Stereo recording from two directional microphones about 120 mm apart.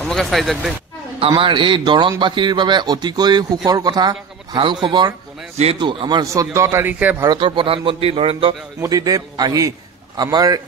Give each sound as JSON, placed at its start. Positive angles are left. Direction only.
{"t": 0.0, "sound": "speech", "side_deg": 5}
{"t": 1.3, "sound": "a man's voice", "side_deg": -40}
{"t": 6.2, "sound": "speech", "side_deg": -25}
{"t": 7.2, "sound": "a man's voice", "side_deg": -45}
{"t": 8.8, "sound": "a man's voice", "side_deg": -30}